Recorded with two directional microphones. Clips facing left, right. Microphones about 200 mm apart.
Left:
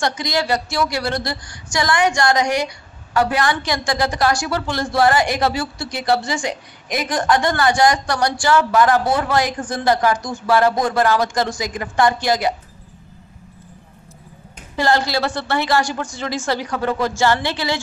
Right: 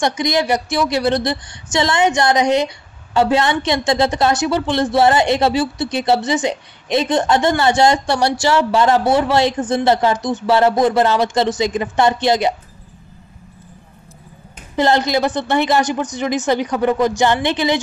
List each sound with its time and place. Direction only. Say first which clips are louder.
0.0 s a woman's voice: right 4 dB; 20° right (ahead or behind)
14.8 s a woman's voice: right 3 dB; 20° right (ahead or behind)